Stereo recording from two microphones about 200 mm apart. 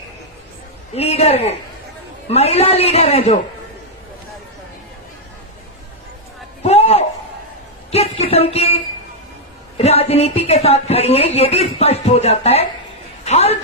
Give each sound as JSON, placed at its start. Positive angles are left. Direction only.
{"t": 0.9, "sound": "speech", "side_deg": 30}
{"t": 6.6, "sound": "a sound", "side_deg": 30}
{"t": 9.8, "sound": "a woman's voice", "side_deg": 30}